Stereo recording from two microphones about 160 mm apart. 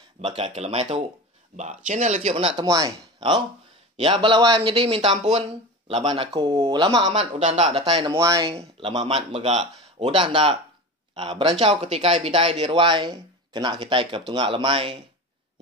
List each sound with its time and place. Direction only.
0.2 s speech: 35° right (ahead or behind)
2.3 s speech: 30° right (ahead or behind)
7.1 s speech: 45° right (ahead or behind)
7.8 s speech: 30° right (ahead or behind)
8.5 s speech: 35° right (ahead or behind)